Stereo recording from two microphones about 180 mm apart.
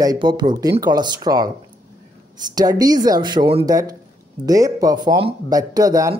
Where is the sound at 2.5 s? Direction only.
20° right (ahead or behind).